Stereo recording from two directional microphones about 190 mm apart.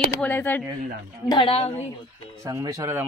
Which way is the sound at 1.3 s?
30° left (ahead or behind).